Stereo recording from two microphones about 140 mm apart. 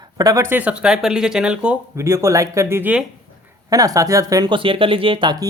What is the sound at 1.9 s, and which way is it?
Speech, 20° right (ahead or behind).